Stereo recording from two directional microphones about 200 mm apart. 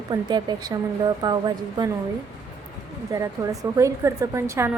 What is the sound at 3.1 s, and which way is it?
A woman's voice, 15° right (ahead or behind).